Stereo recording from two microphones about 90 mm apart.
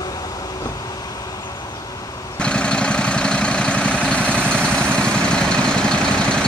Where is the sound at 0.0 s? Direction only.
45° left (ahead or behind).